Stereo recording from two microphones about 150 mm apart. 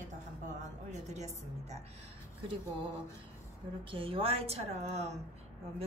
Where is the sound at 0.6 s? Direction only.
50° right (ahead or behind).